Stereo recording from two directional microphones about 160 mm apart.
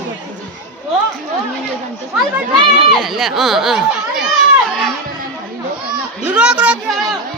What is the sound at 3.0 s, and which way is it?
Speech, centre (ahead or behind).